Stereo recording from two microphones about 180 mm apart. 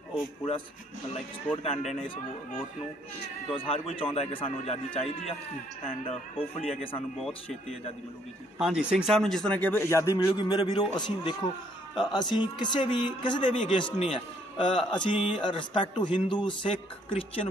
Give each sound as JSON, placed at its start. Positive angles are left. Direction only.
{"t": 1.1, "sound": "a man's voice", "side_deg": 35}
{"t": 3.5, "sound": "a man's voice", "side_deg": 30}
{"t": 7.2, "sound": "speech", "side_deg": 0}
{"t": 8.5, "sound": "a man's voice", "side_deg": 0}